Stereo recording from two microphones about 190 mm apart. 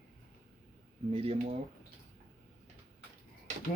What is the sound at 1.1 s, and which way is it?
Speech, 30° right (ahead or behind).